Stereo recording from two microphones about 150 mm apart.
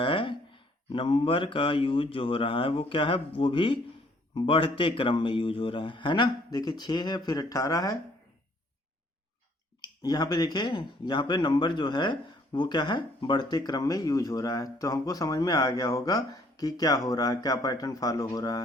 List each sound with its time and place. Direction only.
0.0 s speech: 35° left (ahead or behind)
9.8 s speech: 25° left (ahead or behind)